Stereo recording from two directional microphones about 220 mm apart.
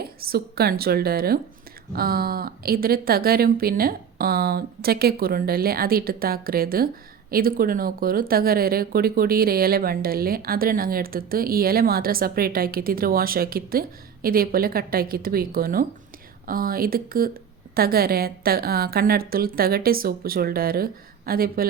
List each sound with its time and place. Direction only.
0.0 s speech: 45° right (ahead or behind)